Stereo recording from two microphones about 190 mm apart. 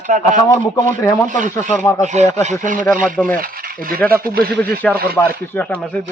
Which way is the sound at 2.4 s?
40° right (ahead or behind).